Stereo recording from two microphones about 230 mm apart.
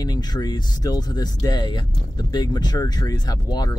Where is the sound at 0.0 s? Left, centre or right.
Centre.